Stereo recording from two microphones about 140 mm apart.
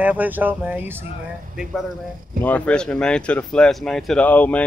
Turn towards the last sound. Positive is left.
turn(degrees=10)  # may be behind; listen again after turning